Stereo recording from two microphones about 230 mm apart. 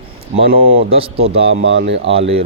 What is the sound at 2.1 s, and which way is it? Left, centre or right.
Speech, right.